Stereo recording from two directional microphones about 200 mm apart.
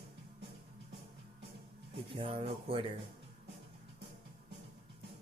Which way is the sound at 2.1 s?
25° right (ahead or behind).